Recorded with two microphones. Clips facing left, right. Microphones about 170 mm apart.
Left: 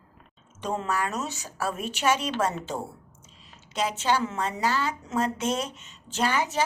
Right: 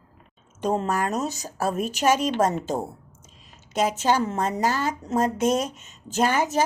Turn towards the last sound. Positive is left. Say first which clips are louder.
# right 4 dB
turn(degrees=-45)  # may be behind; listen again after turning